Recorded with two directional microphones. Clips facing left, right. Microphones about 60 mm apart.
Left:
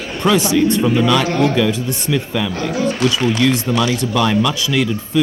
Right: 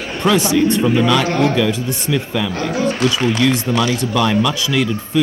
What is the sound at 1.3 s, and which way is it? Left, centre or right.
Speech, right.